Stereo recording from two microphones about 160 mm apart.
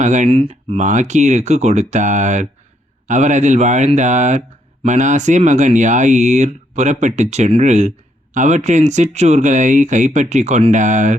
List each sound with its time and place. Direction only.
0.0 s speech: 50° right (ahead or behind)
0.3 s speech: 35° right (ahead or behind)